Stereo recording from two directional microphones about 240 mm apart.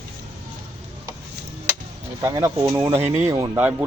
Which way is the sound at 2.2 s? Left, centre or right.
Centre.